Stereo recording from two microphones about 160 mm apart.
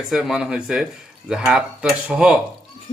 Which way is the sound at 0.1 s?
Centre (ahead or behind).